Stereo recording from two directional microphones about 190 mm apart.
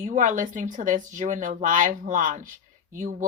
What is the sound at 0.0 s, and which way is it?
Speech, 40° right (ahead or behind).